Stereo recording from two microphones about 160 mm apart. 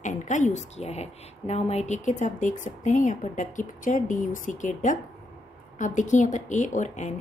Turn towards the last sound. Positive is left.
turn(degrees=50)  # may be behind; listen again after turning